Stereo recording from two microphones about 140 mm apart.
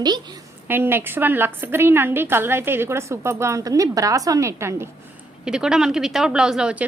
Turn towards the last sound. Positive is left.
turn(degrees=-5)  # may be behind; listen again after turning